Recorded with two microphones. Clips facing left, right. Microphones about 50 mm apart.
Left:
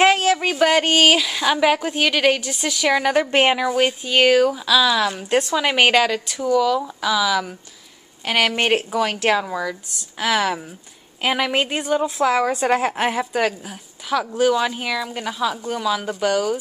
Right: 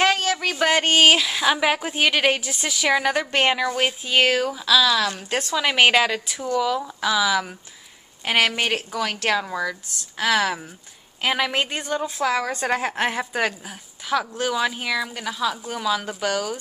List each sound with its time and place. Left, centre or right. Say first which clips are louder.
0.0 s a sound: left 5 dB; left
0.5 s a woman's voice: even; centre
3.3 s a woman's voice: left 3 dB; centre
8.6 s speech: left 6 dB; left
9.0 s a woman's voice: left 4 dB; centre